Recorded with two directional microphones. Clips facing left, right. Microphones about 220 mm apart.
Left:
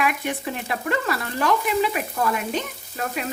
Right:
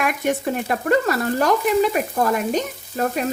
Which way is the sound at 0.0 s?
45° right (ahead or behind).